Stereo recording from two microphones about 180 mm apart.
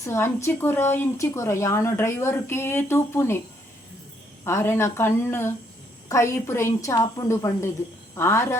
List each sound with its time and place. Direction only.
0.0 s speech: 15° left (ahead or behind)
4.4 s speech: 15° left (ahead or behind)